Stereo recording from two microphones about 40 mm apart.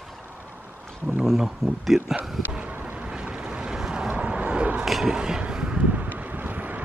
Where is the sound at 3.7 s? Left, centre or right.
Centre.